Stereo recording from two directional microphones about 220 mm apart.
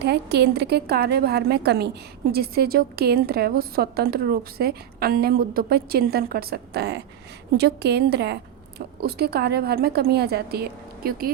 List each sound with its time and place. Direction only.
0.0 s a woman's voice: 50° right (ahead or behind)